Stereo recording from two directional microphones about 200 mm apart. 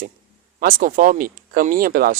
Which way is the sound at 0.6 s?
45° right (ahead or behind).